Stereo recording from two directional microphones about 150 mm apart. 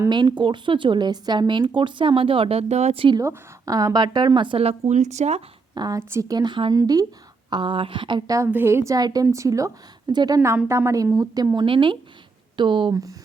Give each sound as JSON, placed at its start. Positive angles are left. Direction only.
{"t": 0.1, "sound": "speech", "side_deg": -30}
{"t": 3.2, "sound": "speech", "side_deg": -25}
{"t": 5.7, "sound": "a woman's voice", "side_deg": -25}
{"t": 8.4, "sound": "a woman's voice", "side_deg": -15}